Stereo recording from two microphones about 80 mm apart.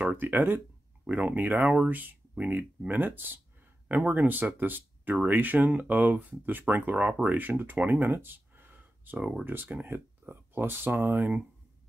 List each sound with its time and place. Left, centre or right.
0.0 s speech: right